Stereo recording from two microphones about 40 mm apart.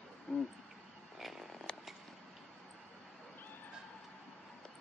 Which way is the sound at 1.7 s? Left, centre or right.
Left.